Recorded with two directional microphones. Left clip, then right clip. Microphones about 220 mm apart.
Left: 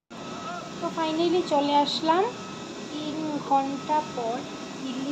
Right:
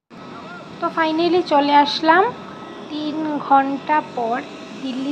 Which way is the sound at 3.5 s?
15° right (ahead or behind).